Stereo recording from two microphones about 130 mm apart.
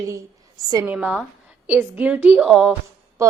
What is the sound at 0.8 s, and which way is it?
A woman's voice, 10° right (ahead or behind).